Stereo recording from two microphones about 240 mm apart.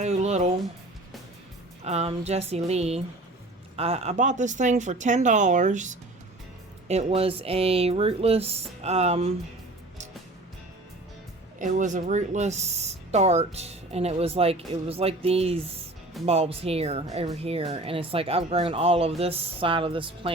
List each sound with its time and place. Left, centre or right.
0.0 s music: right
1.8 s speech: right
11.6 s speech: right